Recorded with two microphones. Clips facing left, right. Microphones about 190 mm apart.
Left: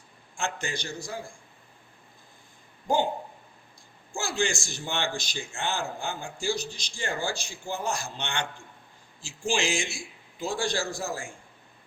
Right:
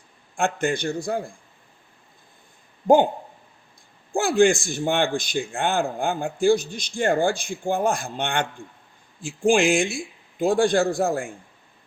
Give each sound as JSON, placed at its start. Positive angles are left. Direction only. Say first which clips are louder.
{"t": 0.3, "sound": "a man's voice", "louder": "right 10 dB", "side_deg": -55}
{"t": 2.8, "sound": "a man's voice", "louder": "right 10 dB", "side_deg": -55}
{"t": 4.1, "sound": "a man's voice", "louder": "right 12 dB", "side_deg": -55}